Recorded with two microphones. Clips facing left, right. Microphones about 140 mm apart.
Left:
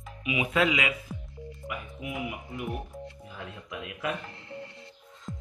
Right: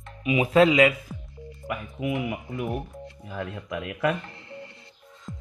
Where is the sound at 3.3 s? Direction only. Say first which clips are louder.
Right 8 dB; 60° right (ahead or behind).